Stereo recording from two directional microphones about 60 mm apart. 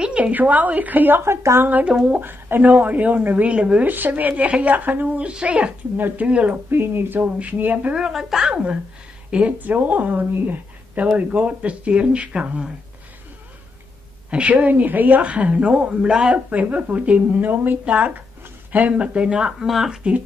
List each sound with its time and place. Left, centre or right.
0.0 s a woman's voice: right
1.2 s a woman's voice: right
1.9 s speech: centre
2.1 s a woman's voice: right
3.9 s a woman's voice: right
5.9 s a woman's voice: right
6.2 s a woman's voice: centre
6.5 s a woman's voice: right
7.9 s speech: centre
9.6 s a woman's voice: right; by 12.7 s centre
14.3 s a woman's voice: right
16.4 s a woman's voice: right; by 20.0 s centre